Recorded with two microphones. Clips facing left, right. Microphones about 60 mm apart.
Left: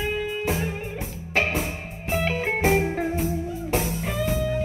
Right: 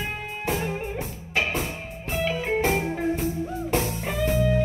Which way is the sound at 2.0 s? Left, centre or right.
Left.